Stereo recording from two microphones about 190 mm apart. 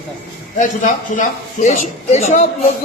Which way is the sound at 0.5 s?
45° left (ahead or behind).